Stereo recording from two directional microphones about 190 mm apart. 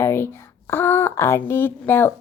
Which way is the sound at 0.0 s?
15° left (ahead or behind).